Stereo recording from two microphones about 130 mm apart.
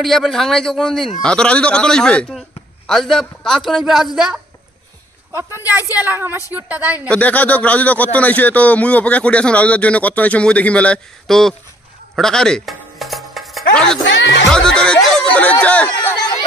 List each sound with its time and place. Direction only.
0.0 s a man's voice: centre (ahead or behind)
5.3 s a woman's voice: 20° right (ahead or behind)
7.1 s a man's voice: 10° left (ahead or behind)
12.2 s music: 5° left (ahead or behind)
14.5 s speech: 5° left (ahead or behind)
15.6 s chatter: 10° left (ahead or behind)